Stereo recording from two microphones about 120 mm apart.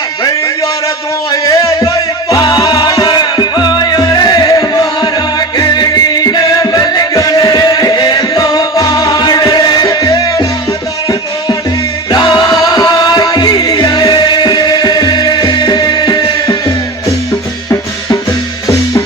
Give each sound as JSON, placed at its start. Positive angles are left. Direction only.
{"t": 1.3, "sound": "a sound", "side_deg": 30}
{"t": 2.3, "sound": "music", "side_deg": 30}
{"t": 12.1, "sound": "music", "side_deg": 40}